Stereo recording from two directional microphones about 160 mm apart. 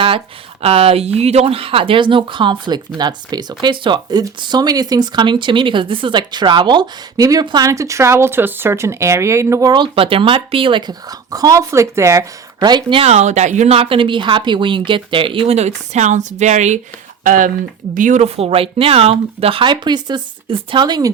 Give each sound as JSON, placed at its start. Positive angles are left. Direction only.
{"t": 0.6, "sound": "speech", "side_deg": -40}
{"t": 18.3, "sound": "speech", "side_deg": -35}